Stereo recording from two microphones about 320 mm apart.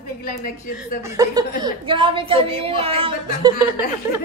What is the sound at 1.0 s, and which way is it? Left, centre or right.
A woman's voice, centre.